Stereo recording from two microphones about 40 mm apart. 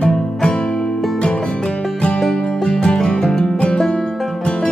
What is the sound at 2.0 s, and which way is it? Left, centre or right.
Music, left.